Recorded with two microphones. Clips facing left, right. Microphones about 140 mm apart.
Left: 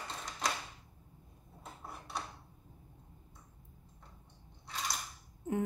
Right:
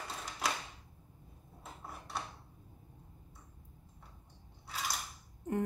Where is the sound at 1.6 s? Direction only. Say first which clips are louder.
Even; centre (ahead or behind).